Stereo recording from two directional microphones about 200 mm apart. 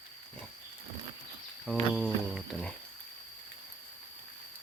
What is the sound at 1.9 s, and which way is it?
Speech, centre (ahead or behind).